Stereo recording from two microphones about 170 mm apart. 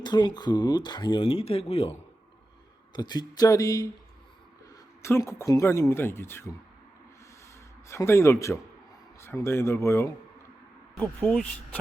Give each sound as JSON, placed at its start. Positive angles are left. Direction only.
{"t": 0.0, "sound": "speech", "side_deg": 25}
{"t": 5.0, "sound": "speech", "side_deg": 15}
{"t": 7.9, "sound": "speech", "side_deg": 15}
{"t": 11.2, "sound": "speech", "side_deg": 5}